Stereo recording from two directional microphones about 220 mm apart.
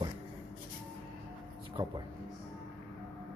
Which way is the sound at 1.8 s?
20° right (ahead or behind).